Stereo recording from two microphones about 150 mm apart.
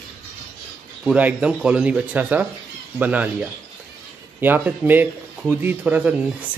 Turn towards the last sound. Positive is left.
turn(degrees=-10)  # may be behind; listen again after turning